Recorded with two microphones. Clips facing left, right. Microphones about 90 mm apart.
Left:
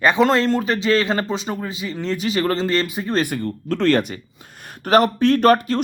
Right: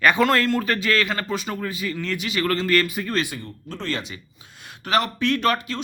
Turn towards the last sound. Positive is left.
turn(degrees=45)  # may be behind; listen again after turning